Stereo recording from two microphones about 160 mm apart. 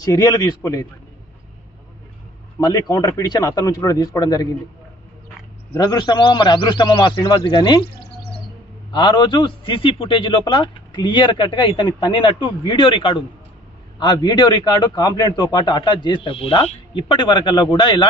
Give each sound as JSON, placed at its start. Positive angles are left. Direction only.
{"t": 0.0, "sound": "a man's voice", "side_deg": 25}
{"t": 2.6, "sound": "a man's voice", "side_deg": 25}
{"t": 5.7, "sound": "a man's voice", "side_deg": 25}
{"t": 8.9, "sound": "a man's voice", "side_deg": 30}